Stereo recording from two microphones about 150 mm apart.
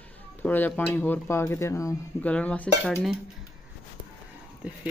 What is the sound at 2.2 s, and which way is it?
Speech, 10° left (ahead or behind).